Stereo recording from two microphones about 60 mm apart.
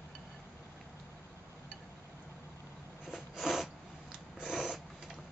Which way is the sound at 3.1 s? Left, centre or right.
Centre.